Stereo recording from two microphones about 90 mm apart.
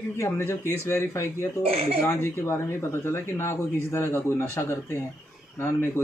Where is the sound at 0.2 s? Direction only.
30° left (ahead or behind).